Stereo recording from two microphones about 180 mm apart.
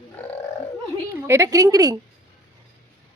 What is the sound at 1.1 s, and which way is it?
Speech, 15° right (ahead or behind).